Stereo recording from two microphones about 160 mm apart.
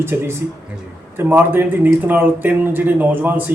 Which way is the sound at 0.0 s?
15° right (ahead or behind).